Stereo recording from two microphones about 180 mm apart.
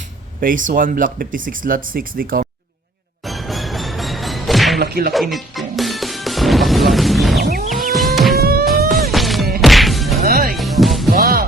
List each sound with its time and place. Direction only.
0.3 s speech: 50° right (ahead or behind)
3.2 s music: centre (ahead or behind)
4.8 s music: 60° right (ahead or behind)
5.1 s music: centre (ahead or behind)
7.7 s livestock: centre (ahead or behind)
8.4 s music: 55° right (ahead or behind)
9.1 s a sound: centre (ahead or behind)
9.6 s whack: centre (ahead or behind)
10.2 s music: 55° right (ahead or behind)
10.5 s music: centre (ahead or behind)
11.1 s music: 55° right (ahead or behind)